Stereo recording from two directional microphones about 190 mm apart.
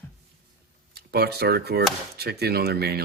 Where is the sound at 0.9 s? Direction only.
55° right (ahead or behind).